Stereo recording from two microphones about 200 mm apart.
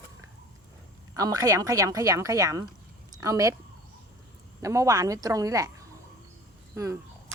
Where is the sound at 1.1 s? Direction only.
20° right (ahead or behind).